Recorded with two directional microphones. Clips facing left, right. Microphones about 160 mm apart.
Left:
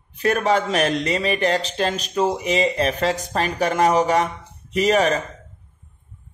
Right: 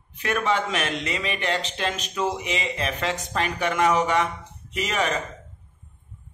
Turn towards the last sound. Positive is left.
turn(degrees=40)  # may be behind; listen again after turning